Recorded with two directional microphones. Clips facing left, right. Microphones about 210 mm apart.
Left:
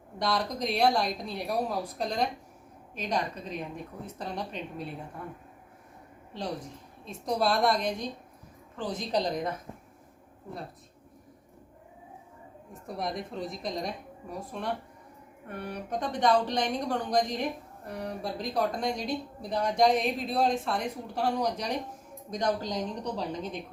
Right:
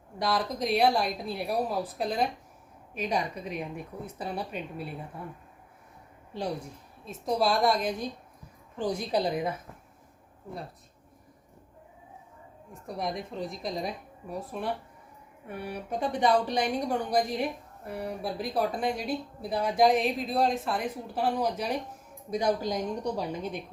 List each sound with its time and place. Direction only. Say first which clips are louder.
0.2 s speech: right 1 dB; centre (ahead or behind)
6.3 s speech: right 2 dB; 10° right (ahead or behind)
12.9 s speech: right 1 dB; centre (ahead or behind)